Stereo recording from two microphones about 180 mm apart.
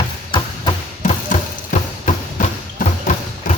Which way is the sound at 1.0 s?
40° left (ahead or behind).